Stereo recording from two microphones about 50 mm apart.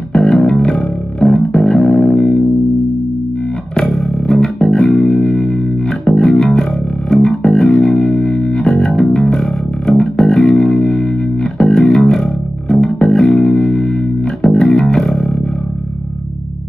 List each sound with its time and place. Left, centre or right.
0.1 s music: centre
1.9 s music: centre
3.8 s music: centre
8.4 s music: centre
8.6 s music: centre